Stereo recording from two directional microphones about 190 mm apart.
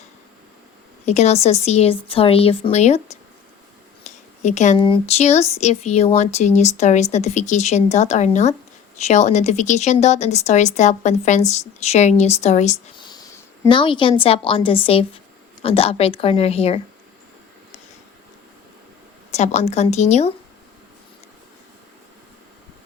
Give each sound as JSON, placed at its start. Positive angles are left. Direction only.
{"t": 1.0, "sound": "speech", "side_deg": 35}
{"t": 13.0, "sound": "speech", "side_deg": 20}
{"t": 19.3, "sound": "speech", "side_deg": 35}